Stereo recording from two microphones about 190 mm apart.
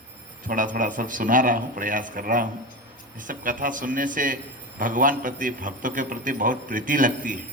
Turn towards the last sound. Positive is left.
turn(degrees=-45)  # may be behind; listen again after turning